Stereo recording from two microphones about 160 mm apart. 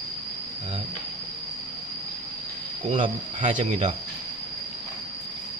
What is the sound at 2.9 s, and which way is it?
Speech, 45° right (ahead or behind).